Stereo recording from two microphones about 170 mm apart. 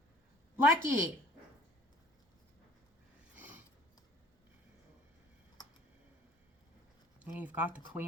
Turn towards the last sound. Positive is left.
turn(degrees=-10)  # may be behind; listen again after turning